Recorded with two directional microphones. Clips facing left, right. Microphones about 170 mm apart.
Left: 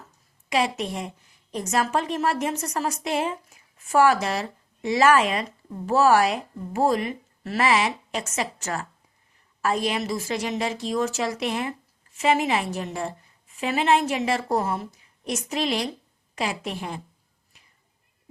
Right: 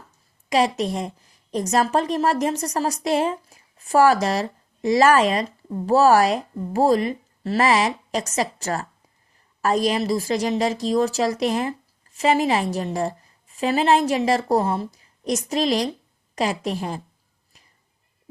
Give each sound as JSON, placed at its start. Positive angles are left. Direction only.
{"t": 0.5, "sound": "a woman's voice", "side_deg": -35}